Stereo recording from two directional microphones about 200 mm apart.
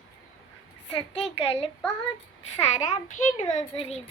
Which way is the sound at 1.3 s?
30° left (ahead or behind).